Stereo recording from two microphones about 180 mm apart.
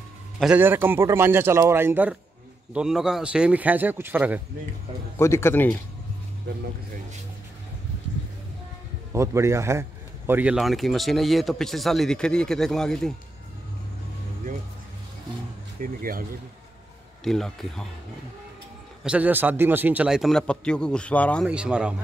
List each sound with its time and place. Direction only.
0.4 s a man's voice: 10° right (ahead or behind)
5.1 s speech: 15° left (ahead or behind)
9.1 s a man's voice: 15° right (ahead or behind); by 13.1 s 5° left (ahead or behind)
15.8 s speech: 50° right (ahead or behind)
17.2 s a man's voice: centre (ahead or behind)
19.0 s a man's voice: 10° right (ahead or behind); by 21.5 s 5° left (ahead or behind)
21.5 s a man's voice: 5° right (ahead or behind)